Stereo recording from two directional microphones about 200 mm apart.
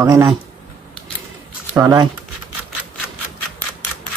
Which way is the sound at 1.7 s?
20° right (ahead or behind).